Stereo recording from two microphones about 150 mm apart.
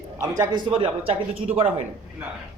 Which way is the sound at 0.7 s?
40° right (ahead or behind).